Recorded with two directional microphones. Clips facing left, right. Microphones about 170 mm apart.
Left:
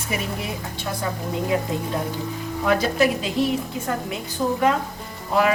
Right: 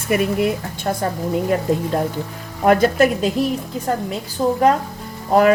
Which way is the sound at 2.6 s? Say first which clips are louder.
Right 6 dB; 50° right (ahead or behind).